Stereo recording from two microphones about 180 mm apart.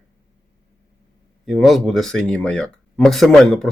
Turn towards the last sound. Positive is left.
turn(degrees=0)  # may be behind; listen again after turning